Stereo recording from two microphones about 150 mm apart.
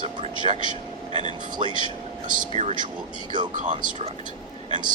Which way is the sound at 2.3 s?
50° right (ahead or behind).